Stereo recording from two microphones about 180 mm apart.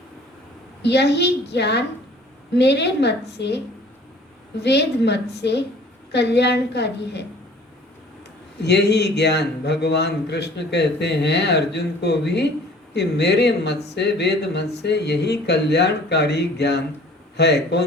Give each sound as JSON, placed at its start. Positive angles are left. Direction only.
{"t": 0.8, "sound": "a man's voice", "side_deg": 70}
{"t": 4.6, "sound": "a man's voice", "side_deg": 70}
{"t": 8.5, "sound": "a man's voice", "side_deg": 65}